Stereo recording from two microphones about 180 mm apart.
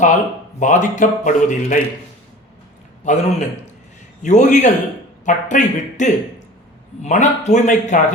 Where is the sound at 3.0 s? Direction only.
40° left (ahead or behind).